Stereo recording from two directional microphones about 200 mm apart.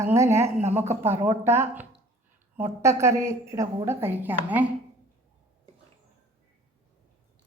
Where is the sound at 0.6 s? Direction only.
35° right (ahead or behind).